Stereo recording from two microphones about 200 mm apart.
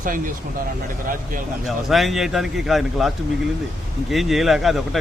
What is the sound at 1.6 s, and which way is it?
A man's voice, centre (ahead or behind).